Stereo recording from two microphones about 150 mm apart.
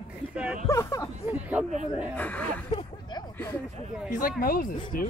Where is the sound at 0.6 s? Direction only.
20° left (ahead or behind).